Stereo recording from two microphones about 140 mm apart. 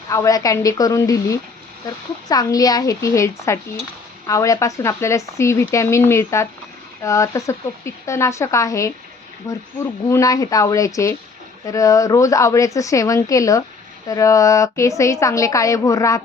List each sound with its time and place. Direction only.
0.1 s speech: 25° left (ahead or behind)